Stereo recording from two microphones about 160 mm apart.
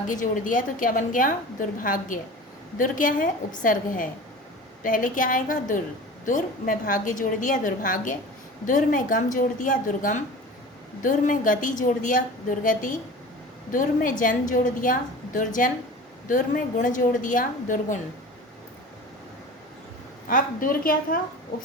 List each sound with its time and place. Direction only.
0.1 s a woman's voice: 55° left (ahead or behind)
20.3 s a woman's voice: 60° left (ahead or behind)